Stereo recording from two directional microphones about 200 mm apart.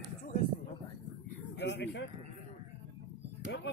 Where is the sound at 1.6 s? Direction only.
60° left (ahead or behind).